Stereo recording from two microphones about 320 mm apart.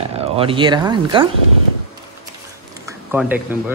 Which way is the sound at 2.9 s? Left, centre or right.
Centre.